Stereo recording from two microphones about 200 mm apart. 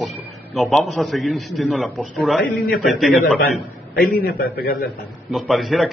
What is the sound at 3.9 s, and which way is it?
Speech, 50° left (ahead or behind).